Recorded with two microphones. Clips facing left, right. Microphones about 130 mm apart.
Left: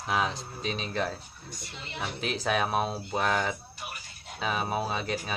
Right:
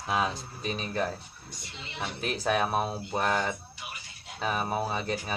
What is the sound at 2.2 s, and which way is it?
Speech, centre (ahead or behind).